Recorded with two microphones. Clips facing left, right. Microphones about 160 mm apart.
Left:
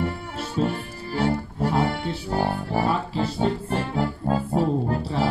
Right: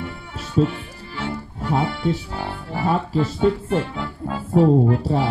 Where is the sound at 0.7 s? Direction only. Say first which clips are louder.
Left 4 dB; 40° left (ahead or behind).